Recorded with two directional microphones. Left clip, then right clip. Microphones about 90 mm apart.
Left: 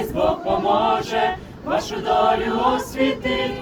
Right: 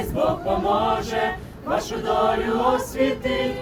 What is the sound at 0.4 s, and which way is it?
Choir, 35° right (ahead or behind).